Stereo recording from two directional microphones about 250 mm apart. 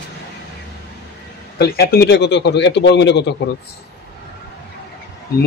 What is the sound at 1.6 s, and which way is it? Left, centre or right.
A man's voice, left.